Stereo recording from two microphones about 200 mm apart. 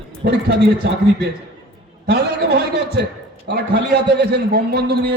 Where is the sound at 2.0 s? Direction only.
55° right (ahead or behind).